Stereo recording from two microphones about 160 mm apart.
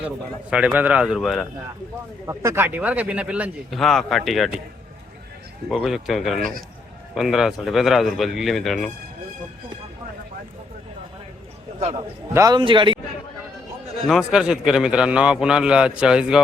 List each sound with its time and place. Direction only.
0.5 s a man's voice: 10° right (ahead or behind)
2.2 s speech: 15° right (ahead or behind); by 4.5 s centre (ahead or behind)
5.6 s a man's voice: centre (ahead or behind)
12.3 s a man's voice: 20° right (ahead or behind)
14.1 s a man's voice: 5° right (ahead or behind)